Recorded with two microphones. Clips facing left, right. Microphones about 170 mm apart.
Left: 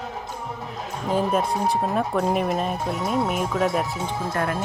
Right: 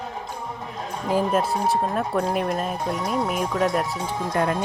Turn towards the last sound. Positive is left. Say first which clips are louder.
# right 2 dB
turn(degrees=-20)  # may be behind; listen again after turning